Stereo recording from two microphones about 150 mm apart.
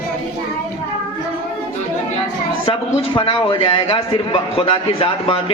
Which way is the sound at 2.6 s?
35° left (ahead or behind).